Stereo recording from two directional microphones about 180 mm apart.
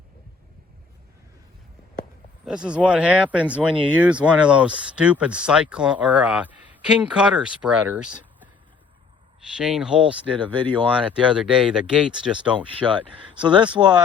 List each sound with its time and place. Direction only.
2.4 s speech: 5° right (ahead or behind)
9.5 s speech: 5° right (ahead or behind)
13.4 s speech: 25° right (ahead or behind)